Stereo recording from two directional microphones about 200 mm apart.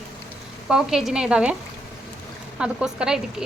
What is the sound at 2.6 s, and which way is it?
Speech, 5° right (ahead or behind).